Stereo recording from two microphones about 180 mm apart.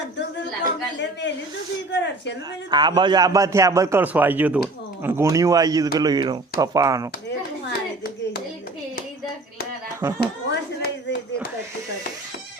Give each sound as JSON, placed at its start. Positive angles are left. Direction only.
{"t": 0.9, "sound": "a woman's voice", "side_deg": 80}
{"t": 2.6, "sound": "a man's voice", "side_deg": -25}
{"t": 7.7, "sound": "hands", "side_deg": 60}
{"t": 10.2, "sound": "a sound", "side_deg": 65}